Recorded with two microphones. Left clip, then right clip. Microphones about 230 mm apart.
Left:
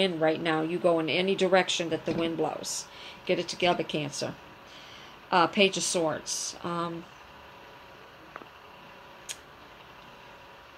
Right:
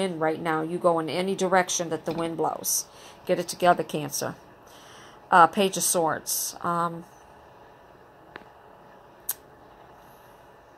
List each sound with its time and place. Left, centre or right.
0.4 s a woman's voice: centre
5.3 s a woman's voice: right